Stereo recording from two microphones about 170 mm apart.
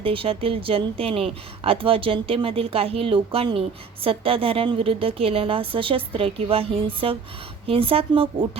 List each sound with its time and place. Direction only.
0.0 s speech: 30° right (ahead or behind)